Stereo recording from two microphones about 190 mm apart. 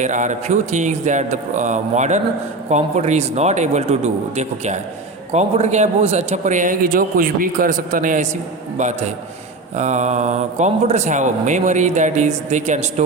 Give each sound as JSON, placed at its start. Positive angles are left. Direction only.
{"t": 0.0, "sound": "speech", "side_deg": -40}